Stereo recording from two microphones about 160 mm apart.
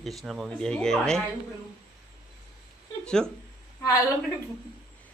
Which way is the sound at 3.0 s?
5° left (ahead or behind).